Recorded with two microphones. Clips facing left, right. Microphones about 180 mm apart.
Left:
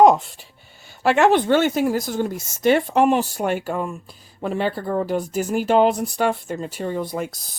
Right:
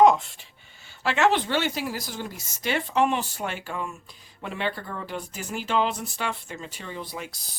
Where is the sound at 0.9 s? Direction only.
50° left (ahead or behind).